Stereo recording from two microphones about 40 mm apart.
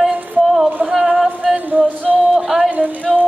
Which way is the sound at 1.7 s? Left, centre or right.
Right.